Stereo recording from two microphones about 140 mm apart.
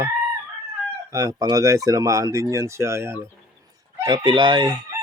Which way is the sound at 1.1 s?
25° right (ahead or behind).